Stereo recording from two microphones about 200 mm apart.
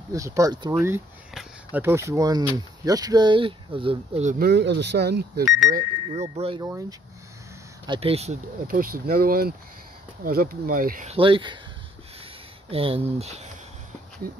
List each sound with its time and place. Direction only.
0.1 s speech: 15° right (ahead or behind)
1.3 s speech: 5° right (ahead or behind); by 4.5 s 40° right (ahead or behind)
4.5 s speech: 60° right (ahead or behind)
5.7 s speech: 40° right (ahead or behind)
6.6 s speech: 15° right (ahead or behind)
8.6 s speech: 45° right (ahead or behind)
11.1 s speech: 25° right (ahead or behind)
12.7 s speech: 30° right (ahead or behind)